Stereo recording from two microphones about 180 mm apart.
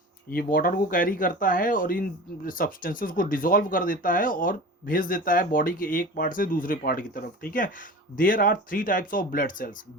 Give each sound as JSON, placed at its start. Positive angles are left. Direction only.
{"t": 0.3, "sound": "speech", "side_deg": 55}